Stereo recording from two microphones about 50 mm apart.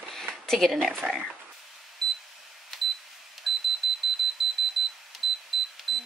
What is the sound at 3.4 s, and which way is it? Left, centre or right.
Alarm clock, centre.